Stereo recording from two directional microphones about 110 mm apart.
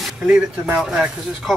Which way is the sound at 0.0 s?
5° right (ahead or behind).